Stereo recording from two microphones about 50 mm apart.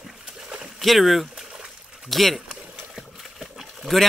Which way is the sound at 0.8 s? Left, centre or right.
Centre.